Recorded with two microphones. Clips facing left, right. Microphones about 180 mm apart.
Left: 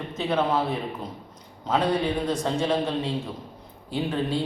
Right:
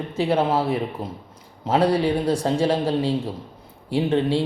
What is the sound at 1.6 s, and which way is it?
A man's voice, 30° right (ahead or behind).